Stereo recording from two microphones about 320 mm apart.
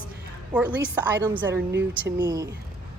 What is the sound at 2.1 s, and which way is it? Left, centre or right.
Speech, centre.